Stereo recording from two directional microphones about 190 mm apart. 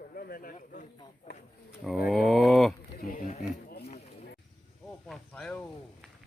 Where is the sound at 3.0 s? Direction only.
45° left (ahead or behind).